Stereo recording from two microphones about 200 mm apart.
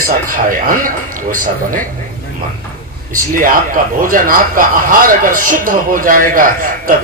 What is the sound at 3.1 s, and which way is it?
Speech, 45° right (ahead or behind).